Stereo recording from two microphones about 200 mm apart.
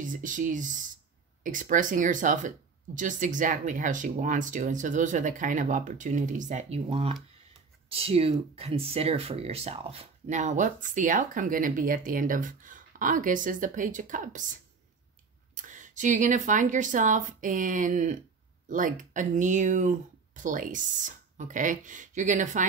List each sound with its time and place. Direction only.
0.0 s speech: 40° right (ahead or behind)
15.5 s speech: 40° right (ahead or behind)